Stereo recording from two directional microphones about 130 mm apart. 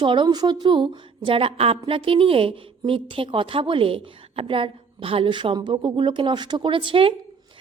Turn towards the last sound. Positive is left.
turn(degrees=-45)  # may be behind; listen again after turning